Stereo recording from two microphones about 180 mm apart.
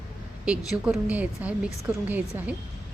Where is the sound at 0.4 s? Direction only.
5° right (ahead or behind).